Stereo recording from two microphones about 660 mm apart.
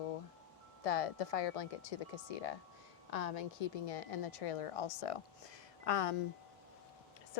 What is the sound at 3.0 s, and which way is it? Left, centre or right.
Speech, left.